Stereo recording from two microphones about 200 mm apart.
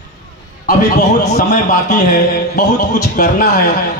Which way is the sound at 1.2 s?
40° left (ahead or behind).